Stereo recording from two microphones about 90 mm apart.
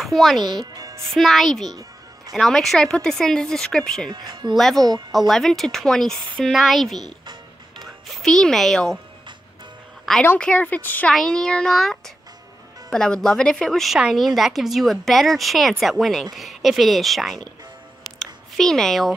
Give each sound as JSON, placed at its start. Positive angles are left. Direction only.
{"t": 0.0, "sound": "speech", "side_deg": 0}
{"t": 0.4, "sound": "music", "side_deg": -55}
{"t": 1.1, "sound": "a woman's voice", "side_deg": 0}
{"t": 1.7, "sound": "music", "side_deg": -45}
{"t": 2.3, "sound": "speech", "side_deg": 5}
{"t": 4.1, "sound": "speech", "side_deg": -55}
{"t": 4.6, "sound": "a woman's voice", "side_deg": 0}
{"t": 10.1, "sound": "a woman's voice", "side_deg": 5}
{"t": 10.4, "sound": "speech", "side_deg": 15}
{"t": 11.1, "sound": "a woman's voice", "side_deg": 5}
{"t": 18.2, "sound": "a sound", "side_deg": 5}